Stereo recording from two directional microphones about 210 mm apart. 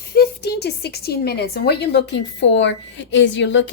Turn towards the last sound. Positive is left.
turn(degrees=60)  # may be behind; listen again after turning